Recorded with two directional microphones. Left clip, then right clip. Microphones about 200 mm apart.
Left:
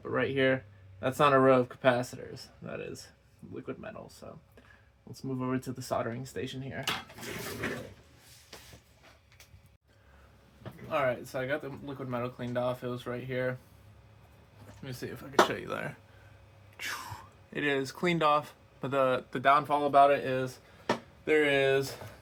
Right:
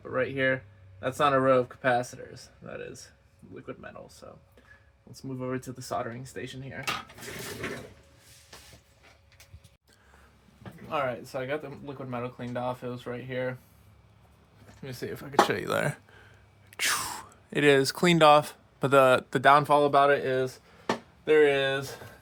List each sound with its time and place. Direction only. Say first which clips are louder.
0.1 s speech: right 1 dB; 35° left (ahead or behind)
3.7 s speech: even; 35° left (ahead or behind)
5.4 s speech: right 1 dB; 30° left (ahead or behind)
10.8 s speech: even; 20° right (ahead or behind)
14.8 s speech: right 4 dB; 35° right (ahead or behind); by 16.0 s 65° right (ahead or behind)
16.7 s speech: right 9 dB; 55° right (ahead or behind)
21.2 s speech: right 4 dB; 25° right (ahead or behind)